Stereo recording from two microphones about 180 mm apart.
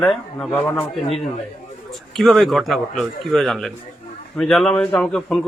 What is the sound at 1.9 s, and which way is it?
A man's voice, centre (ahead or behind).